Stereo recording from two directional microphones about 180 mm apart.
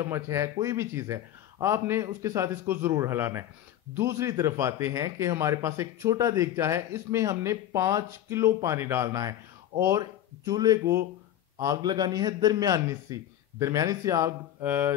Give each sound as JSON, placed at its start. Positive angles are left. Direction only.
{"t": 0.0, "sound": "a man's voice", "side_deg": -15}